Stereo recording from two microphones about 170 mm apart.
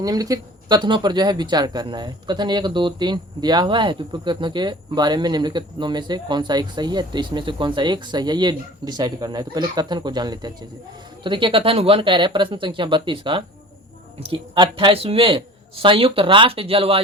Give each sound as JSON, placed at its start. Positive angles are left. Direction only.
{"t": 0.0, "sound": "speech", "side_deg": -20}